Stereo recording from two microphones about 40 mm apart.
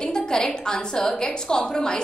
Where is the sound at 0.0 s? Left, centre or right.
Centre.